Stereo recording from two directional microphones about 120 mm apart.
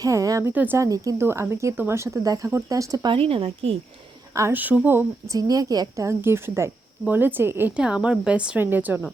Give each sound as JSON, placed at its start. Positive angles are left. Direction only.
{"t": 0.0, "sound": "a woman's voice", "side_deg": -30}
{"t": 0.5, "sound": "a woman's voice", "side_deg": -15}
{"t": 0.8, "sound": "a woman's voice", "side_deg": -25}
{"t": 3.1, "sound": "a woman's voice", "side_deg": -50}
{"t": 4.4, "sound": "a woman's voice", "side_deg": -20}
{"t": 5.3, "sound": "a woman's voice", "side_deg": -30}
{"t": 7.8, "sound": "a woman's voice", "side_deg": -5}